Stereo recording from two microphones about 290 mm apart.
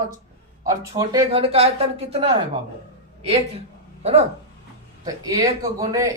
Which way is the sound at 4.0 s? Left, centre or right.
Right.